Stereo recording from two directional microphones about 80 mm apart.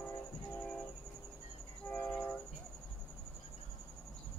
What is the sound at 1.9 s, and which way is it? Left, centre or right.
Train, centre.